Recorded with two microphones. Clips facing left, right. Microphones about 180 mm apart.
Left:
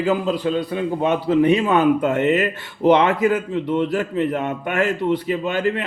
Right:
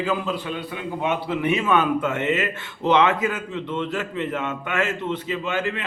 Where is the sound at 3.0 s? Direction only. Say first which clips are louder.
Left 4 dB; 35° left (ahead or behind).